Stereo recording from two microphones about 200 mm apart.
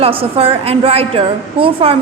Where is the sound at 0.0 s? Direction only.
30° right (ahead or behind).